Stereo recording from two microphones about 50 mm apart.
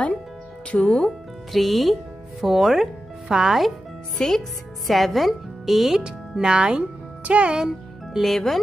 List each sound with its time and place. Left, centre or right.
0.7 s speech: centre
1.5 s a woman's voice: centre
4.2 s a woman's voice: centre
6.0 s a child's voice: centre
8.2 s a woman's voice: centre